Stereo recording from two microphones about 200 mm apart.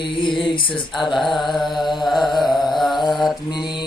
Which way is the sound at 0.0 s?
25° left (ahead or behind).